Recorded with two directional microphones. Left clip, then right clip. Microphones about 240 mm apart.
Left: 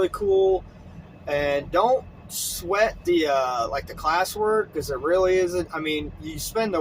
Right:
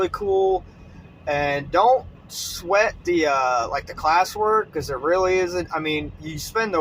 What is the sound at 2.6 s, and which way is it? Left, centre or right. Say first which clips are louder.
Speech: right 2 dB; centre.